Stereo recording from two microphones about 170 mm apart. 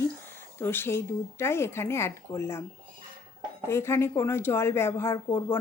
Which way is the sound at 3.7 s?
15° left (ahead or behind).